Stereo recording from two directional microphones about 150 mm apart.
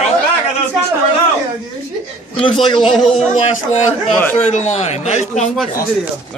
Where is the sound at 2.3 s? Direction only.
35° left (ahead or behind).